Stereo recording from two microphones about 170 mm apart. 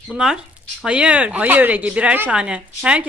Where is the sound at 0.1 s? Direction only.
5° right (ahead or behind).